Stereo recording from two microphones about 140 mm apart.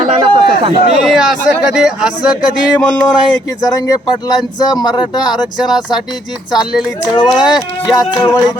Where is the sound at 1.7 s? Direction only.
5° right (ahead or behind).